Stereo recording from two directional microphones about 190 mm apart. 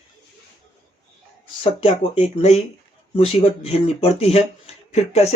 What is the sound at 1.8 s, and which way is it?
Speech, 30° left (ahead or behind).